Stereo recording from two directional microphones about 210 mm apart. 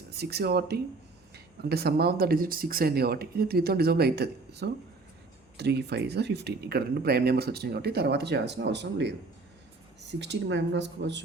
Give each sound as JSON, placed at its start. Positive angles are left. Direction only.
{"t": 0.1, "sound": "speech", "side_deg": -50}